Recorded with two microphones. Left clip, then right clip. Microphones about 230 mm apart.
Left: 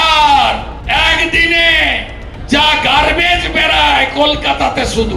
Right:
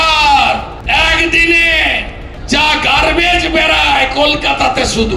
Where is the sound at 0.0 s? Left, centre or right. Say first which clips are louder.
Even; right.